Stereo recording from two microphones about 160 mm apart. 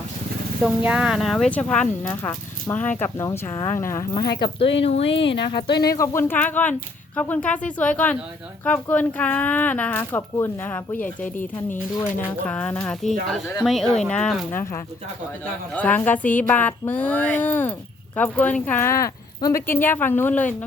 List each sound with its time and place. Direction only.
0.6 s speech: 5° right (ahead or behind); by 4.0 s 15° left (ahead or behind)
4.1 s speech: 25° left (ahead or behind)
5.9 s speech: 20° left (ahead or behind)
15.7 s speech: 10° left (ahead or behind)